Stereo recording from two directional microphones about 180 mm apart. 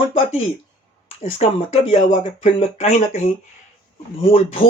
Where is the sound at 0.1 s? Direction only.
35° left (ahead or behind).